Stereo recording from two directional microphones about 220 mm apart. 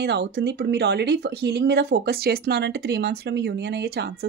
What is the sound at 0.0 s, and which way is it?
Speech, 50° right (ahead or behind).